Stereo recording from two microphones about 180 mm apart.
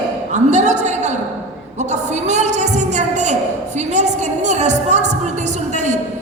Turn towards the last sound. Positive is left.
turn(degrees=-40)  # may be behind; listen again after turning